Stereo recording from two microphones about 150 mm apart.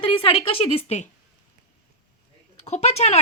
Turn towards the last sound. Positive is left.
turn(degrees=45)  # may be behind; listen again after turning